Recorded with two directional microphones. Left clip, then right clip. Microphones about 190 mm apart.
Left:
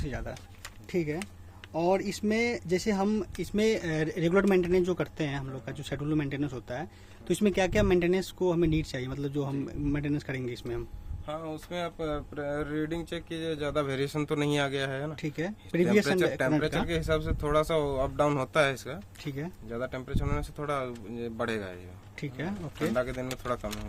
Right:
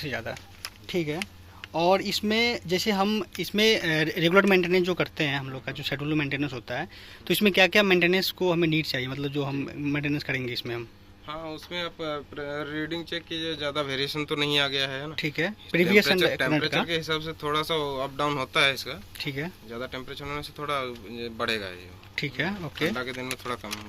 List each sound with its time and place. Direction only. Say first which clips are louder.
0.0 s speech: right 6 dB; 5° left (ahead or behind)
0.6 s a sound: right 2 dB; 15° left (ahead or behind)
1.7 s speech: right 5 dB; 10° left (ahead or behind)
11.3 s speech: right 1 dB; 70° left (ahead or behind)
15.2 s speech: right 7 dB; 10° left (ahead or behind)
16.8 s speech: right 1 dB; 70° left (ahead or behind)
19.2 s speech: right 8 dB; 5° left (ahead or behind)
19.7 s speech: left 2 dB; 60° left (ahead or behind)
22.1 s speech: right 8 dB; 5° left (ahead or behind)
23.0 s speech: left 1 dB; 60° left (ahead or behind)